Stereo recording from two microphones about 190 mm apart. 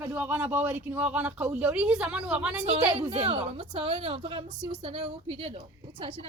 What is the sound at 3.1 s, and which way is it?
A woman's voice, 30° right (ahead or behind).